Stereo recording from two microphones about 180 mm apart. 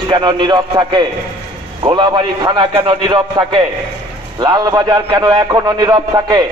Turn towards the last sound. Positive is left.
turn(degrees=-20)  # may be behind; listen again after turning